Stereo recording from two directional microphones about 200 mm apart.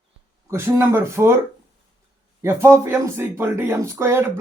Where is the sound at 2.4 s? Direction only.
15° right (ahead or behind).